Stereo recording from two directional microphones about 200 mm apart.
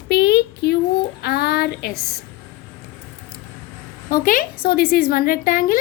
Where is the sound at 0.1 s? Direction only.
55° left (ahead or behind).